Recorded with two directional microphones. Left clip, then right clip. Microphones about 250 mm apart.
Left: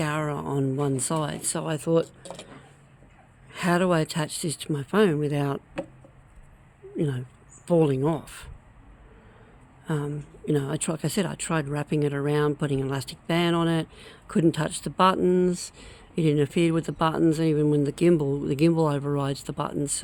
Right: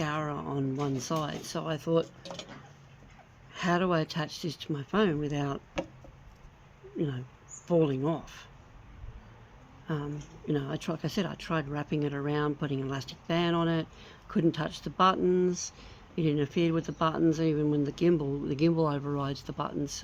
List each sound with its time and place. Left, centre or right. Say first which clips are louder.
0.0 s a sound: left 5 dB; left
3.5 s speech: left 5 dB; left
6.9 s speech: left 5 dB; left
9.8 s speech: left 6 dB; left